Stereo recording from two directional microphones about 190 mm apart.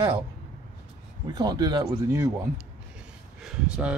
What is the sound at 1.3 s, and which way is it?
Speech, 20° right (ahead or behind).